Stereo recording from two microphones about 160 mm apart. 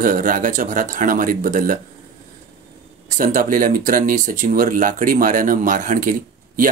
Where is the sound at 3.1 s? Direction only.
55° right (ahead or behind).